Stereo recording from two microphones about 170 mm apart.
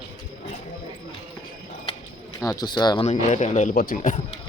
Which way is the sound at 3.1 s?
45° left (ahead or behind).